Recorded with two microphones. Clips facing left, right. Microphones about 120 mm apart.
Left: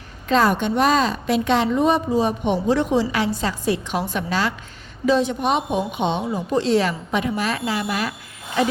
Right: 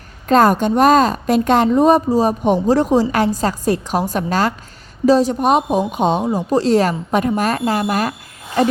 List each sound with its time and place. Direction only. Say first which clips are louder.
0.3 s a woman's voice: right 5 dB; 45° right (ahead or behind)